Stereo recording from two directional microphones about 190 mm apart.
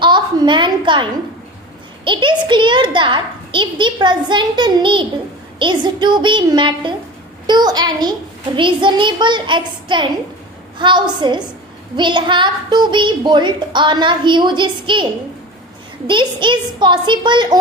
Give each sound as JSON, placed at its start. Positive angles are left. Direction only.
{"t": 0.0, "sound": "a sound", "side_deg": -25}
{"t": 2.0, "sound": "a woman's voice", "side_deg": -25}
{"t": 16.0, "sound": "a woman's voice", "side_deg": -25}